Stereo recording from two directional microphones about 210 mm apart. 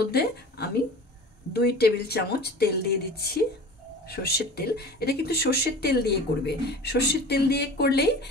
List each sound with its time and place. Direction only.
0.1 s speech: 50° left (ahead or behind)